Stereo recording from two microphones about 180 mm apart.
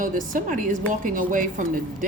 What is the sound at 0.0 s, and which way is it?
A woman's voice, 45° right (ahead or behind).